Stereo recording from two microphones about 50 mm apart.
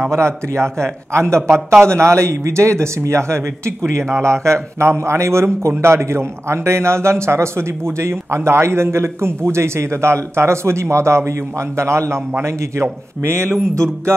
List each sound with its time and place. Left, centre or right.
0.1 s a man's voice: right